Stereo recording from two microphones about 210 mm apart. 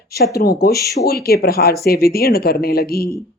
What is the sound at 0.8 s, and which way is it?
Speech, 15° left (ahead or behind).